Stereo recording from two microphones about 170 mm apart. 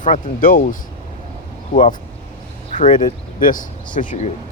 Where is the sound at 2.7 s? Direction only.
45° left (ahead or behind).